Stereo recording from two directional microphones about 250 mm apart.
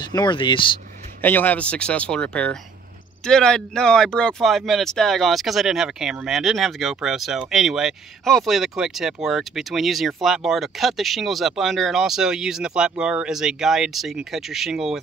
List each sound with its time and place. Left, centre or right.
0.0 s speech: centre
1.2 s speech: centre